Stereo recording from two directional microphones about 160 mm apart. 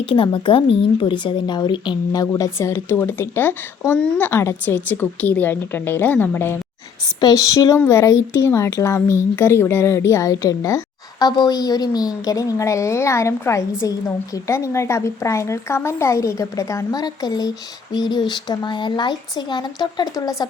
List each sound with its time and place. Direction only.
0.0 s speech: 35° left (ahead or behind); by 6.6 s 15° left (ahead or behind)
7.2 s a woman's voice: 25° left (ahead or behind)